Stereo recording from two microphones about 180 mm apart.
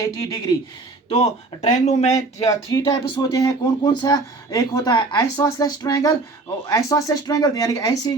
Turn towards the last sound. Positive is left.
turn(degrees=20)  # may be behind; listen again after turning